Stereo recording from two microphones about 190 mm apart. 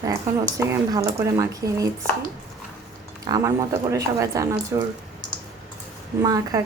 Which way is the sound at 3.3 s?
15° right (ahead or behind).